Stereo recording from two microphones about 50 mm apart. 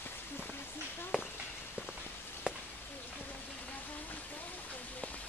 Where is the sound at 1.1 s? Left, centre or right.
Centre.